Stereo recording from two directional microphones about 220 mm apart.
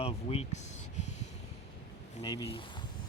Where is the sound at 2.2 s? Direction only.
20° left (ahead or behind).